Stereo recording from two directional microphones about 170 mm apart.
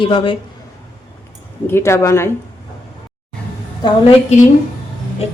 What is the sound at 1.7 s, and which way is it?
Speech, 15° left (ahead or behind).